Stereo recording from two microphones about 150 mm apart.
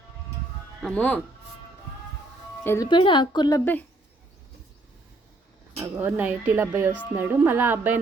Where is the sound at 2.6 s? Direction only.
15° left (ahead or behind).